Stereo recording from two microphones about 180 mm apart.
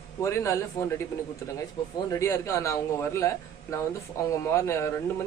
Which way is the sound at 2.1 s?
15° left (ahead or behind).